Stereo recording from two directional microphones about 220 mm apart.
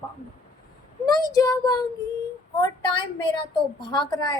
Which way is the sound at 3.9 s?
20° left (ahead or behind).